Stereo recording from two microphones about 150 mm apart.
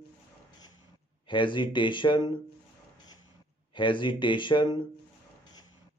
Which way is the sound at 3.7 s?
35° left (ahead or behind).